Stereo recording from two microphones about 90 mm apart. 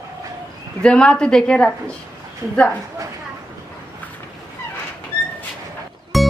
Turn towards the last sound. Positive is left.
turn(degrees=0)  # may be behind; listen again after turning